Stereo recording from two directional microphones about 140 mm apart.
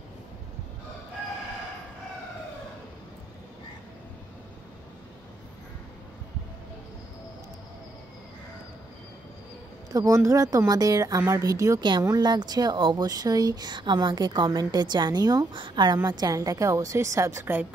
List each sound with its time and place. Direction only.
9.8 s a woman's voice: 25° right (ahead or behind)